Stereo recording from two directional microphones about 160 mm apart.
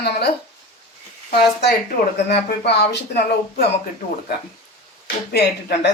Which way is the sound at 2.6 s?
90° left.